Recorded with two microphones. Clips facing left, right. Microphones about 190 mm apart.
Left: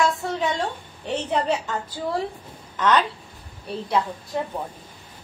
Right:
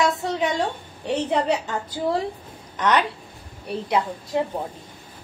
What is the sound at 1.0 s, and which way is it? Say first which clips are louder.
Speech: right 2 dB; 25° right (ahead or behind).